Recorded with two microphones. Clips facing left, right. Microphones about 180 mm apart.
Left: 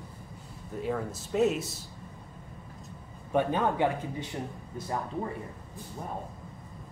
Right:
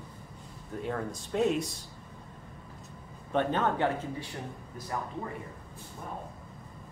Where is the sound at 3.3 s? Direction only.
10° left (ahead or behind).